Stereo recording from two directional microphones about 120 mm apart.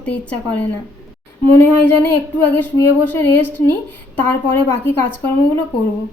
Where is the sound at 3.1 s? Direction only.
15° left (ahead or behind).